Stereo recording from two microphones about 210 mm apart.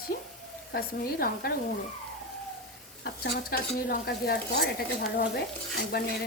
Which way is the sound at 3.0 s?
50° left (ahead or behind).